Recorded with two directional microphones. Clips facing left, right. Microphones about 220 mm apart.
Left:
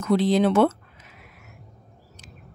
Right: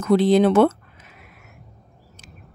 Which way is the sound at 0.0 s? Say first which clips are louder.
Right 4 dB; 55° right (ahead or behind).